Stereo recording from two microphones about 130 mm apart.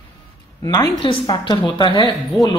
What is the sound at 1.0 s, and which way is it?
Speech, 40° left (ahead or behind).